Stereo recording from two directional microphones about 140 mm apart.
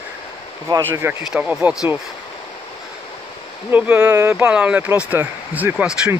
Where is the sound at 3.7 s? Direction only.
10° right (ahead or behind).